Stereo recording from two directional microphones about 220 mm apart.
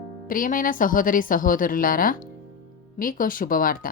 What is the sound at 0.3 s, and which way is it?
Speech, 40° left (ahead or behind).